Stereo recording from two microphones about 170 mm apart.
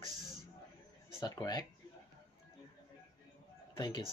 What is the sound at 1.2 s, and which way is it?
Speech, 25° left (ahead or behind).